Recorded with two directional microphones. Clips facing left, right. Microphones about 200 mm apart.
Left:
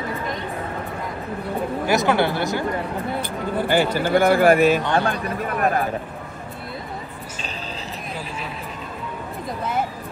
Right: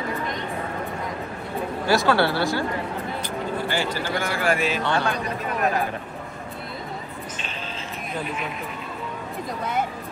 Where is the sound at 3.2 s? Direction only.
55° left (ahead or behind).